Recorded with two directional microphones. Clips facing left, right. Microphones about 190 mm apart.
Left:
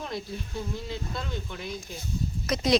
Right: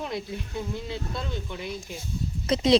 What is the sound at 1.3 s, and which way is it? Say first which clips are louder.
Speech: right 2 dB; 15° right (ahead or behind).